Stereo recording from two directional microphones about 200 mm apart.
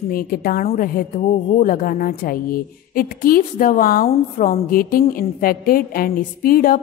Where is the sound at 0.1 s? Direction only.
45° left (ahead or behind).